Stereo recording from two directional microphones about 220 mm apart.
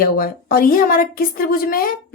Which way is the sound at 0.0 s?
40° left (ahead or behind).